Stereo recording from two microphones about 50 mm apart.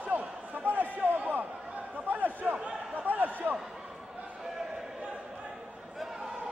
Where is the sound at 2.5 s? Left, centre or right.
Right.